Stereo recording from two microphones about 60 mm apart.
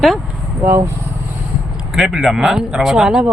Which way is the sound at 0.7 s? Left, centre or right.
Right.